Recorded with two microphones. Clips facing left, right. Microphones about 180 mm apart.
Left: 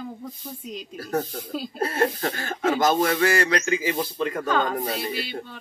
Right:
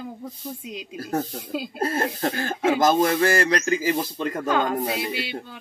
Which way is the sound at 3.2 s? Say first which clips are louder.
Right 1 dB; 40° right (ahead or behind).